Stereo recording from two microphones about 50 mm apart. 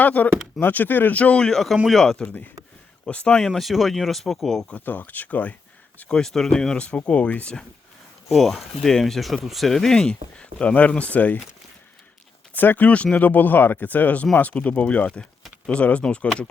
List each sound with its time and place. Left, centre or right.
0.0 s speech: left
1.4 s speech: centre
2.2 s speech: left
3.0 s speech: left
3.4 s speech: centre
4.7 s speech: left
6.1 s speech: centre
6.8 s speech: left
8.3 s speech: centre
10.1 s speech: left
12.5 s speech: left